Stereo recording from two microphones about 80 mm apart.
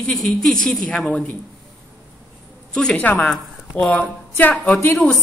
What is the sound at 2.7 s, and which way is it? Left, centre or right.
A woman's voice, centre.